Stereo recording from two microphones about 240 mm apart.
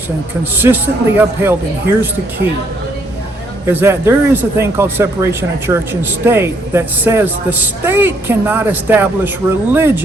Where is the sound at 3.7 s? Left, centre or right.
Centre.